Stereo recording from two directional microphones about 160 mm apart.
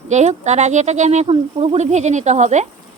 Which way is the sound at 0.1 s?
45° right (ahead or behind).